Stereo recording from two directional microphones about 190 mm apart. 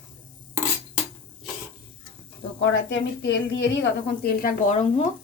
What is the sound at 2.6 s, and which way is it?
A woman's voice, 75° left (ahead or behind).